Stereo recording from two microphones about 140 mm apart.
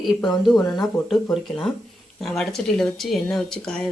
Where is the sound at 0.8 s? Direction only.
Centre (ahead or behind).